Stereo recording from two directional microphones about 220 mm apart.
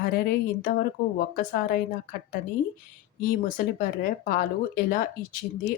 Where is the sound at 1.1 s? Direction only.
40° left (ahead or behind).